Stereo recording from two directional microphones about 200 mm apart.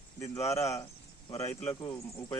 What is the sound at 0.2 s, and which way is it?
Speech, 15° left (ahead or behind).